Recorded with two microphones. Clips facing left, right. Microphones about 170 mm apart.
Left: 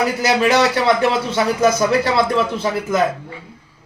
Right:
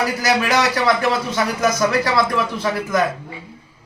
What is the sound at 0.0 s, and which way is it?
Speech, 25° left (ahead or behind).